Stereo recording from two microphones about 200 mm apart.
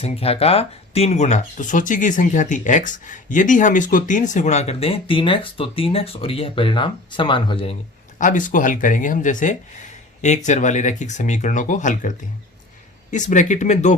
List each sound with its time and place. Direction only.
0.0 s speech: 30° left (ahead or behind)
8.2 s speech: 40° left (ahead or behind)